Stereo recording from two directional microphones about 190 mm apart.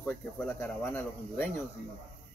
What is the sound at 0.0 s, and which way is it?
Speech, 10° left (ahead or behind).